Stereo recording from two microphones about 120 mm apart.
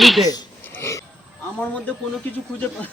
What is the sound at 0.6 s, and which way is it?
Wheeze, 15° left (ahead or behind).